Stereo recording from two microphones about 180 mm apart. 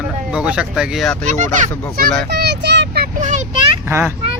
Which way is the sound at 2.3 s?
65° right (ahead or behind).